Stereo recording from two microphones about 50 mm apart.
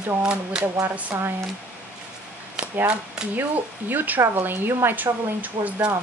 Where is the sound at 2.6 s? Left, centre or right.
Centre.